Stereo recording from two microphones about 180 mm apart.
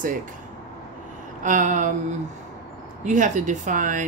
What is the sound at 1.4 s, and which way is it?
Speech, 45° right (ahead or behind).